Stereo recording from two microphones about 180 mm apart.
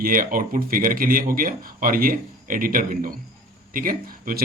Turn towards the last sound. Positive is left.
turn(degrees=-50)  # may be behind; listen again after turning